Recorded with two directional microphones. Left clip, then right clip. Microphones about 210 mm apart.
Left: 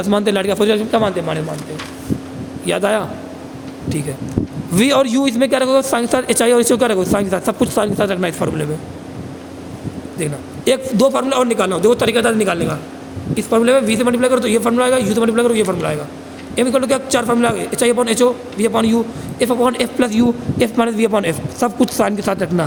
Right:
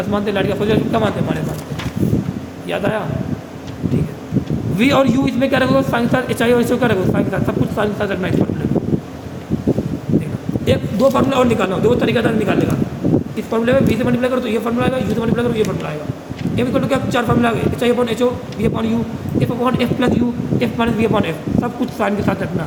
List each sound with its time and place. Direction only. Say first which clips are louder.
0.1 s a man's voice: left 4 dB; 60° left (ahead or behind); by 1.4 s 45° left (ahead or behind)
2.6 s a man's voice: left 4 dB; 60° left (ahead or behind)
4.8 s a man's voice: left 1 dB; 55° left (ahead or behind)
10.7 s a man's voice: left 1 dB; 60° left (ahead or behind)